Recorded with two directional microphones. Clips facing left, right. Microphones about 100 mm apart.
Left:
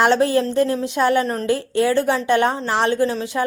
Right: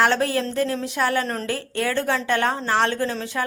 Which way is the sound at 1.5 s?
20° left (ahead or behind).